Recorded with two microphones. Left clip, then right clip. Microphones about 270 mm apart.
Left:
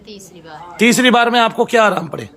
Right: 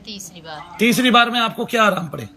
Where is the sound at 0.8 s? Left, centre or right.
Centre.